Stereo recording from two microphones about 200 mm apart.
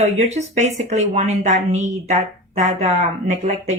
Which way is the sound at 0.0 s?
35° right (ahead or behind).